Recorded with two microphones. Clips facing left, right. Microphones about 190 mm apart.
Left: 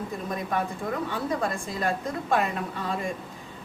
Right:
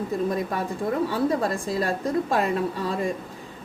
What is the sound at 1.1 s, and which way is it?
A woman's voice, 35° right (ahead or behind).